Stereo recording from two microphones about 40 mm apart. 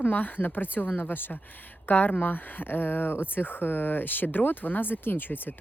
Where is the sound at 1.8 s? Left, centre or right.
Left.